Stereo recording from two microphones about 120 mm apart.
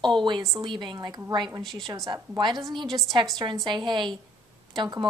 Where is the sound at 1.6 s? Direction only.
Centre (ahead or behind).